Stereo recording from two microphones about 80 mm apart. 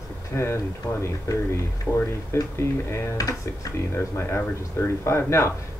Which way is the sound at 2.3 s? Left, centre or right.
Left.